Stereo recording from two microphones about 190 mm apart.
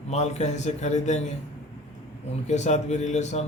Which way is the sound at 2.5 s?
35° left (ahead or behind).